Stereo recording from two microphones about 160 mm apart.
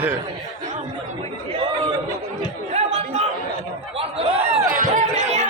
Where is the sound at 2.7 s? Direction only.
45° right (ahead or behind).